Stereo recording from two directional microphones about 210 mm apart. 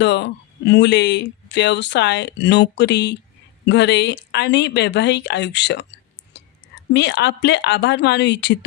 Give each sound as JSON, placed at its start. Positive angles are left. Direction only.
{"t": 0.0, "sound": "speech", "side_deg": 55}
{"t": 6.3, "sound": "whispering", "side_deg": 55}
{"t": 6.9, "sound": "speech", "side_deg": 55}